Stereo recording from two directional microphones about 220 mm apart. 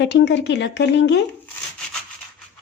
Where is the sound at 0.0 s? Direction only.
50° left (ahead or behind).